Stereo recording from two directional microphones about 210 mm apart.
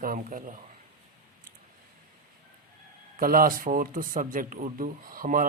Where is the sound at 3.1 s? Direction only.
45° right (ahead or behind).